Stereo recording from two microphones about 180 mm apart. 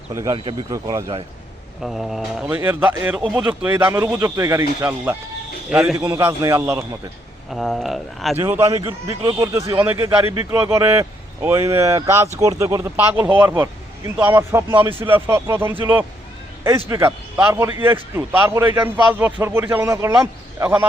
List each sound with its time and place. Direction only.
0.1 s speech: 15° right (ahead or behind)
1.8 s speech: centre (ahead or behind); by 6.8 s 15° right (ahead or behind)
7.5 s speech: centre (ahead or behind)
8.4 s speech: 15° right (ahead or behind)